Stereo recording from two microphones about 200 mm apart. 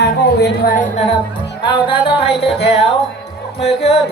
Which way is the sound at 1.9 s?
25° left (ahead or behind).